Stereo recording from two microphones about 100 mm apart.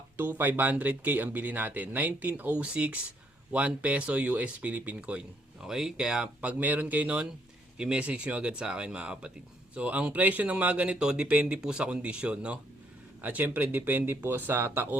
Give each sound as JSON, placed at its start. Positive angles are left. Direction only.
{"t": 0.2, "sound": "speech", "side_deg": -20}